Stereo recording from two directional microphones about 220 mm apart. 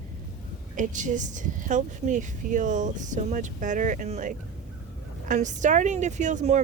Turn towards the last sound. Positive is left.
turn(degrees=-35)  # may be behind; listen again after turning